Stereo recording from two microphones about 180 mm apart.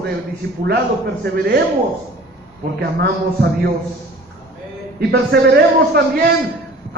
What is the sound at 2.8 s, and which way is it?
Speech, 65° right (ahead or behind).